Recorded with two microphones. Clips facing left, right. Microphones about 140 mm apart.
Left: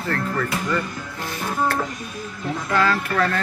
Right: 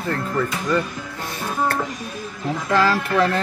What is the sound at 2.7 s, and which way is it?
Speech, 30° right (ahead or behind).